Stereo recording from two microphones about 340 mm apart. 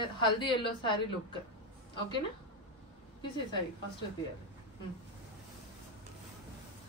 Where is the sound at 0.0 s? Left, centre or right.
Centre.